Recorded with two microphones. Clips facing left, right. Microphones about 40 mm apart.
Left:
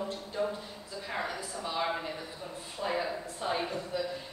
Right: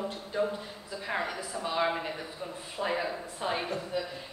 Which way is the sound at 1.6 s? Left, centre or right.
Right.